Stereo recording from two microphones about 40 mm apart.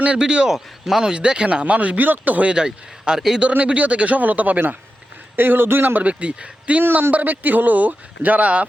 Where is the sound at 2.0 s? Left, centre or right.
Right.